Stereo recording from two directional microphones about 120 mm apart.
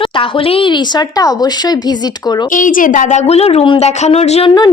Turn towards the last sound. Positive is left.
turn(degrees=60)  # may be behind; listen again after turning